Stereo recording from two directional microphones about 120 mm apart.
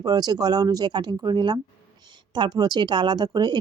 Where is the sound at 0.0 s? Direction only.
35° right (ahead or behind).